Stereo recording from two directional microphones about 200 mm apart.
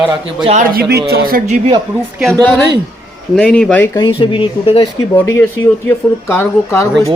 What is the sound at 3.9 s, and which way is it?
Speech, 25° left (ahead or behind).